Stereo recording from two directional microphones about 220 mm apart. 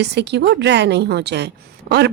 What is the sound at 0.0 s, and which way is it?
A woman's voice, 50° right (ahead or behind).